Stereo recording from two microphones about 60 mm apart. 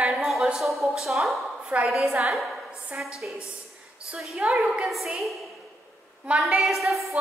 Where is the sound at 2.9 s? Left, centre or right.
Right.